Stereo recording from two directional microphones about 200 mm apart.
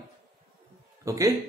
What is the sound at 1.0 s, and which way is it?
Speech, 15° right (ahead or behind).